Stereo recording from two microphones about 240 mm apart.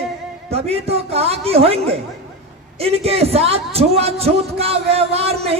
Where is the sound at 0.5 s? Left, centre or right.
Right.